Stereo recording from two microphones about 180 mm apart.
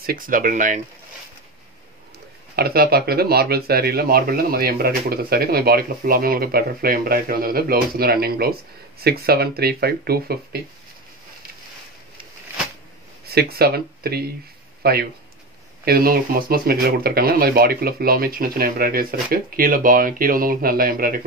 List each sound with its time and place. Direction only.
0.0 s speech: 50° right (ahead or behind)
2.5 s speech: 60° right (ahead or behind)
13.3 s speech: 60° right (ahead or behind)